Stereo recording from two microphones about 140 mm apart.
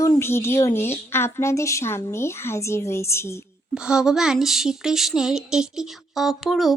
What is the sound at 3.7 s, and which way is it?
A woman's voice, 5° right (ahead or behind).